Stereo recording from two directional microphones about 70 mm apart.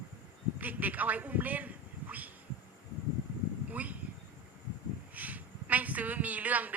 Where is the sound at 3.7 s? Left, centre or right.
Right.